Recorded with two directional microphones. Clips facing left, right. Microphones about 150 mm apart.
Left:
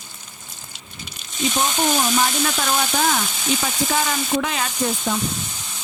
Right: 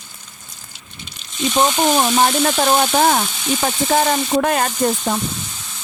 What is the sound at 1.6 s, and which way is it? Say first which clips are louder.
Speech: right 6 dB; 50° right (ahead or behind).